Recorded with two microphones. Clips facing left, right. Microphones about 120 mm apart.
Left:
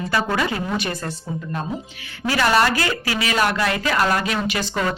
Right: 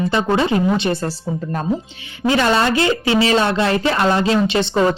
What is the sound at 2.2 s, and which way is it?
A woman's voice, 25° right (ahead or behind).